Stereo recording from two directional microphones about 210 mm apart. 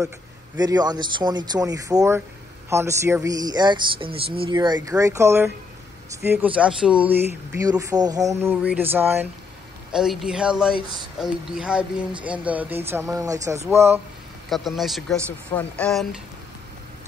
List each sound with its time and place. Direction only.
0.6 s a man's voice: 20° right (ahead or behind)
14.5 s speech: centre (ahead or behind)